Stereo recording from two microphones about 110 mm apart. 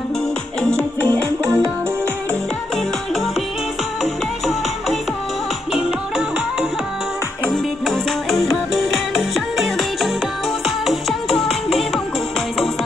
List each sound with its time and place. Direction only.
0.6 s music: 5° left (ahead or behind)
1.0 s music: 20° left (ahead or behind)
5.7 s music: 5° right (ahead or behind)